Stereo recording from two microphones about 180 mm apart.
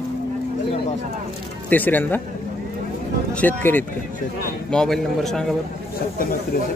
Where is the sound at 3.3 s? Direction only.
10° left (ahead or behind).